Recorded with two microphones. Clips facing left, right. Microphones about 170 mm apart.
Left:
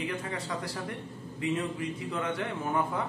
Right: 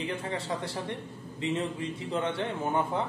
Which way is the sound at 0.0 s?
30° right (ahead or behind).